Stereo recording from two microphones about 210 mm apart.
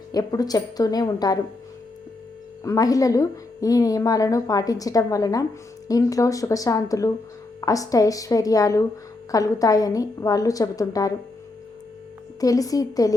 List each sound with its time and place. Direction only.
0.1 s a woman's voice: 15° left (ahead or behind)
2.6 s a woman's voice: 15° left (ahead or behind)
12.4 s a woman's voice: 15° left (ahead or behind)